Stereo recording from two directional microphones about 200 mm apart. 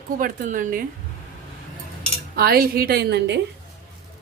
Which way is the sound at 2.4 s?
50° right (ahead or behind).